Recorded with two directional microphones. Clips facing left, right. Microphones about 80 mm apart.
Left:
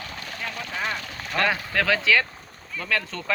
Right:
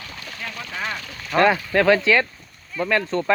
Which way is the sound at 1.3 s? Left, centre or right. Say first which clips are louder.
Right 7 dB; right.